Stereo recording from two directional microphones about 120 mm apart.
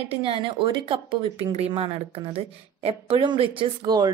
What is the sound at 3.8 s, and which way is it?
Speech, 35° right (ahead or behind).